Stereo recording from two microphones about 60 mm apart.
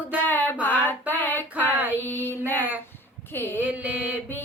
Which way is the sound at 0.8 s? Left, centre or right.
Left.